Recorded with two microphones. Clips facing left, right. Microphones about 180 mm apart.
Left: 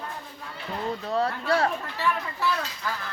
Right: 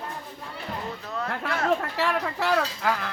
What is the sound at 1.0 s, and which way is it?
Speech, 35° left (ahead or behind).